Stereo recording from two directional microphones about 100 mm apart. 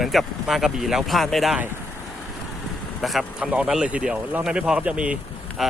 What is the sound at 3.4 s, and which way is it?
Speech, 10° right (ahead or behind).